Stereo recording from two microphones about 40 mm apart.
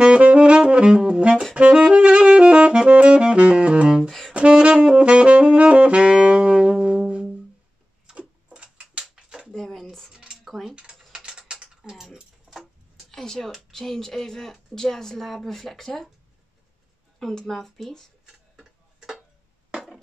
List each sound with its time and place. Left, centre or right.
0.0 s saxophone: right
8.1 s tick-tock: right
9.0 s a sound: centre
9.5 s a sound: centre
10.3 s mechanisms: centre
11.1 s typing: centre
11.6 s a sound: right
12.5 s tick-tock: right
13.1 s a sound: centre
14.8 s a woman's voice: centre
17.3 s a woman's voice: centre
18.2 s tick-tock: centre